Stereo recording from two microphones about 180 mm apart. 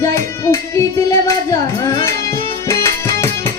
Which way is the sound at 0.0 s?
15° left (ahead or behind).